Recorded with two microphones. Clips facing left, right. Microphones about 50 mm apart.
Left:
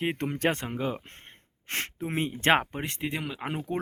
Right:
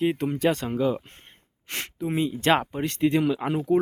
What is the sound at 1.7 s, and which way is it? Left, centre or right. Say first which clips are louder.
Speech: right 3 dB; left.